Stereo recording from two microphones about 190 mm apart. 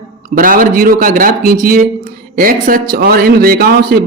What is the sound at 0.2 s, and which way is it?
Speech, 45° right (ahead or behind).